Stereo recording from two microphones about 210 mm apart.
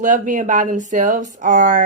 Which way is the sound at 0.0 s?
35° right (ahead or behind).